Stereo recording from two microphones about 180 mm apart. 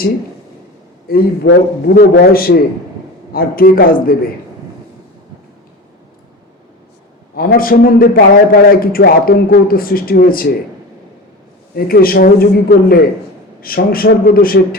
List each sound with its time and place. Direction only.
1.0 s a man's voice: 60° left (ahead or behind)
7.3 s a man's voice: 55° left (ahead or behind)
11.7 s a man's voice: 55° left (ahead or behind)